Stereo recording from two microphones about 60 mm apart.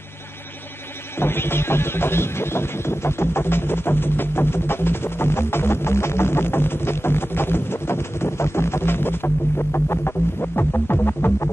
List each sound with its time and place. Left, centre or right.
1.2 s speech: left